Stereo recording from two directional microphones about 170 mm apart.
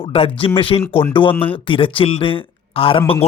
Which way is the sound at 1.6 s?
30° left (ahead or behind).